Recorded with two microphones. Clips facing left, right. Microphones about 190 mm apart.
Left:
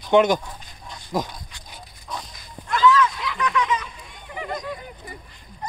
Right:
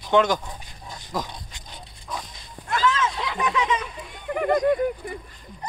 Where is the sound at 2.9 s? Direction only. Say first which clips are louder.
Left 3 dB; 25° right (ahead or behind).